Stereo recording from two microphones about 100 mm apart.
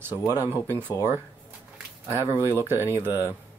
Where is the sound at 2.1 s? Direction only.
25° right (ahead or behind).